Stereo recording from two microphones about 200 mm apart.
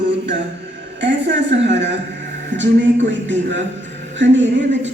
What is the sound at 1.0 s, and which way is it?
Speech, 65° right (ahead or behind).